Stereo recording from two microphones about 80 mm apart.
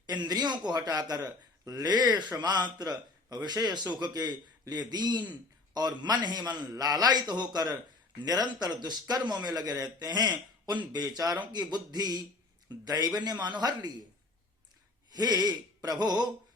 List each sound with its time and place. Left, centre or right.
0.0 s speech: right
15.1 s speech: right